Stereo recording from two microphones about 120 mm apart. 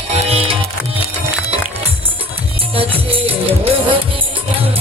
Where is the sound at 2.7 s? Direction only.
55° right (ahead or behind).